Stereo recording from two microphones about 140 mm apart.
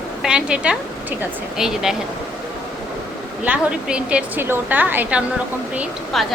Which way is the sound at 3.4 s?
10° right (ahead or behind).